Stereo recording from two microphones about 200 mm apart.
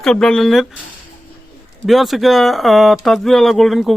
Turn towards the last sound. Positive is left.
turn(degrees=0)  # may be behind; listen again after turning